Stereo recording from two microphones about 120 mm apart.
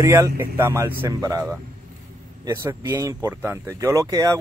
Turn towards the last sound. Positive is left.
turn(degrees=-30)  # may be behind; listen again after turning